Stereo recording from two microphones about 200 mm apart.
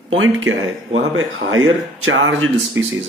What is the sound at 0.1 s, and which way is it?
Speech, 75° right (ahead or behind).